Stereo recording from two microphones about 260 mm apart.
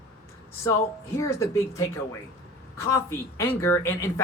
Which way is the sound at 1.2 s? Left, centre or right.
Centre.